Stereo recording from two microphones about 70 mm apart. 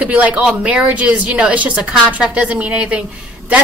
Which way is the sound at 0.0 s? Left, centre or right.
Centre.